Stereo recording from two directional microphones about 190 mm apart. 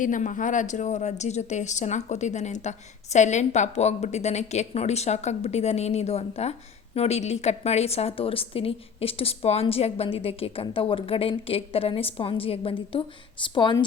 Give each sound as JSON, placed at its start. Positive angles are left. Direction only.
{"t": 0.0, "sound": "speech", "side_deg": 45}